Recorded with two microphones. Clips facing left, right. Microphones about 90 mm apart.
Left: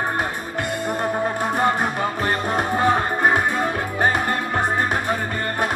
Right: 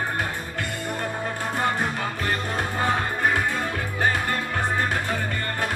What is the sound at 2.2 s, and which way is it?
Music, 20° left (ahead or behind).